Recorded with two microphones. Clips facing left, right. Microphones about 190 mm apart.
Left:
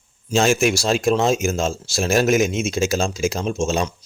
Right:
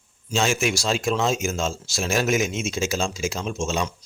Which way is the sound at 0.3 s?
50° left (ahead or behind).